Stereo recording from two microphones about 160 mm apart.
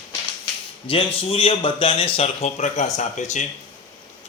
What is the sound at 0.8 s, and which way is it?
A man's voice, 35° left (ahead or behind).